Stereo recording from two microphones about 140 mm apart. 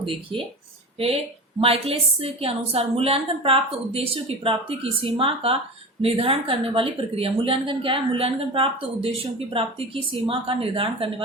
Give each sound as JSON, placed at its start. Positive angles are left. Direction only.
{"t": 0.0, "sound": "a woman's voice", "side_deg": -40}
{"t": 1.6, "sound": "a woman's voice", "side_deg": -45}